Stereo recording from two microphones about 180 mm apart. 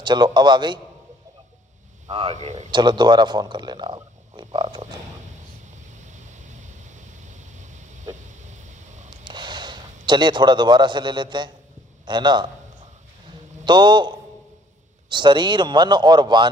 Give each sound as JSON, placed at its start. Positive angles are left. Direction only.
{"t": 0.0, "sound": "speech", "side_deg": -25}
{"t": 2.0, "sound": "speech", "side_deg": -35}
{"t": 2.7, "sound": "speech", "side_deg": -25}
{"t": 5.9, "sound": "waves", "side_deg": -40}
{"t": 8.5, "sound": "a sound", "side_deg": -40}
{"t": 9.2, "sound": "a man's voice", "side_deg": -25}
{"t": 13.7, "sound": "speech", "side_deg": -25}